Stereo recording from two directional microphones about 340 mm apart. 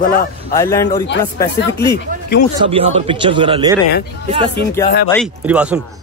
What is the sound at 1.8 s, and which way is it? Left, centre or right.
Speech, left.